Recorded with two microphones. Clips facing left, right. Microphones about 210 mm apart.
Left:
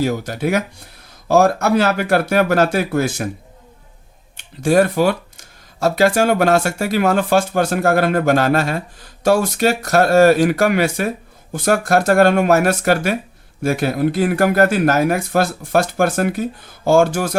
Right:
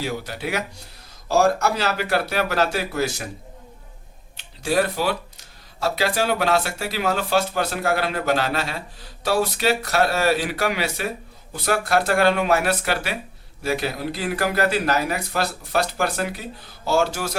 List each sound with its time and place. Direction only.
0.0 s speech: 45° left (ahead or behind)
4.4 s speech: 50° left (ahead or behind)